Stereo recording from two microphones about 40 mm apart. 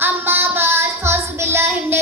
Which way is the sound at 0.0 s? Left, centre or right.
Right.